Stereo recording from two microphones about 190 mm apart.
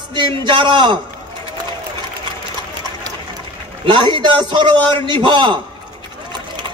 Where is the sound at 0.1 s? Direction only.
25° right (ahead or behind).